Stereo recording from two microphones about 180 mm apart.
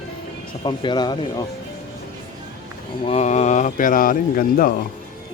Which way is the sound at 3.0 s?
40° left (ahead or behind).